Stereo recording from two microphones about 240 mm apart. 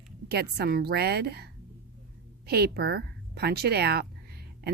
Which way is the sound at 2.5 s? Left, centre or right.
Right.